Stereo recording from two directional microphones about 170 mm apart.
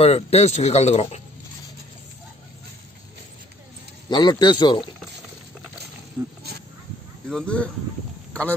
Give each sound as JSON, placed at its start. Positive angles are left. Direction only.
{"t": 0.0, "sound": "speech", "side_deg": 35}
{"t": 4.1, "sound": "speech", "side_deg": 25}
{"t": 7.2, "sound": "speech", "side_deg": 5}